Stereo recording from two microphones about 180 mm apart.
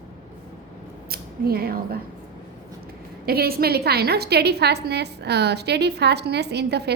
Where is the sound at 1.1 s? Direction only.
60° right (ahead or behind).